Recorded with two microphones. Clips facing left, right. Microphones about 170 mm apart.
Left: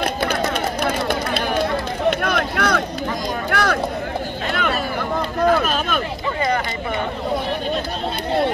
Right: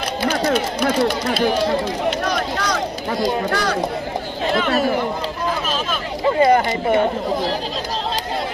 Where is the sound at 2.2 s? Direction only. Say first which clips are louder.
Left 1 dB; 60° left (ahead or behind).